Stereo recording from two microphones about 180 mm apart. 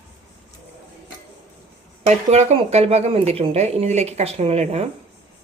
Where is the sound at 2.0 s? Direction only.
35° right (ahead or behind).